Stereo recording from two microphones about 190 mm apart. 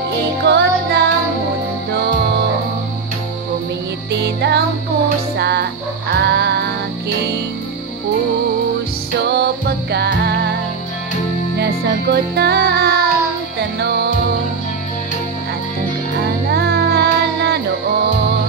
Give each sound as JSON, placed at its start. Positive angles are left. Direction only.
{"t": 0.4, "sound": "music", "side_deg": -60}
{"t": 4.1, "sound": "music", "side_deg": -65}
{"t": 9.2, "sound": "music", "side_deg": -60}
{"t": 11.5, "sound": "music", "side_deg": -60}
{"t": 16.4, "sound": "music", "side_deg": -60}